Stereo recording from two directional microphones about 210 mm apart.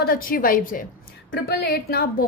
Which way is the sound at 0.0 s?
45° left (ahead or behind).